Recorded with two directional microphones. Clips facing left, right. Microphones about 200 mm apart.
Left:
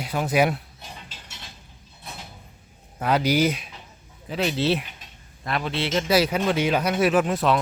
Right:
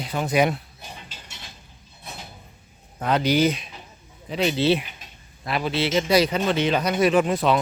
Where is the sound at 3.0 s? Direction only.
10° left (ahead or behind).